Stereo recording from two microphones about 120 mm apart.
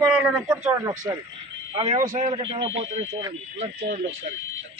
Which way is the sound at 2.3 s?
50° right (ahead or behind).